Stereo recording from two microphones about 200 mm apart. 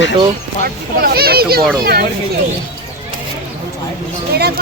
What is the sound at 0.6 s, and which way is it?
Speech, 50° right (ahead or behind).